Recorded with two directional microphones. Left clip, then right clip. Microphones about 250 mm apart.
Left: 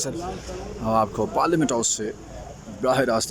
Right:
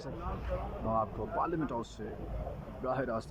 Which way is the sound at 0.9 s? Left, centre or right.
Left.